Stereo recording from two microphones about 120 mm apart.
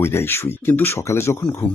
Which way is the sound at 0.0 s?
20° left (ahead or behind).